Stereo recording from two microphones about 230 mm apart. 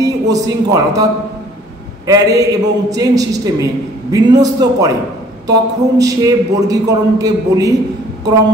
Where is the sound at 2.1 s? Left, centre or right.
Centre.